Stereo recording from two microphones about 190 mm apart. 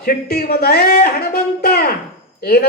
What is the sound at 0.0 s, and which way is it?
A woman's voice, 55° left (ahead or behind).